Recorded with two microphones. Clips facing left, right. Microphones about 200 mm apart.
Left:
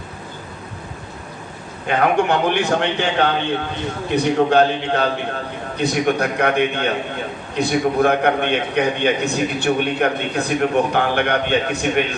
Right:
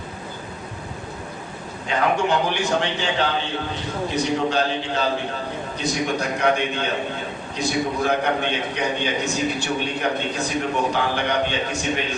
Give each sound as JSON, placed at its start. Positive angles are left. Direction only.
{"t": 1.9, "sound": "a man's voice", "side_deg": 60}